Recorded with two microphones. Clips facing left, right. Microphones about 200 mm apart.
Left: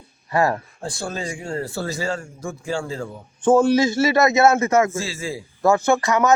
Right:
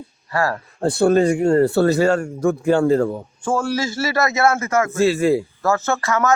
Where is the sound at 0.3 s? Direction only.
20° left (ahead or behind).